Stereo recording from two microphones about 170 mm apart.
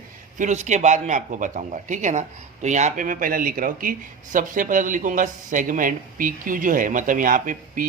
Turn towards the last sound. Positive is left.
turn(degrees=-50)  # may be behind; listen again after turning